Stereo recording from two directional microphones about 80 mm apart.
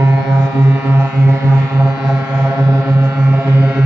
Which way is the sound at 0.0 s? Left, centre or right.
Centre.